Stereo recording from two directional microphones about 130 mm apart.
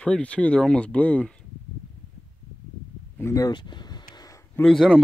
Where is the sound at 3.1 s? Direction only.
25° left (ahead or behind).